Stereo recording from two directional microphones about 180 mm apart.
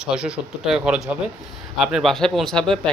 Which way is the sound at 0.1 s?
5° right (ahead or behind).